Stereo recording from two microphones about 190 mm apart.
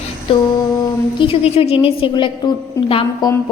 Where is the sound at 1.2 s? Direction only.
30° left (ahead or behind).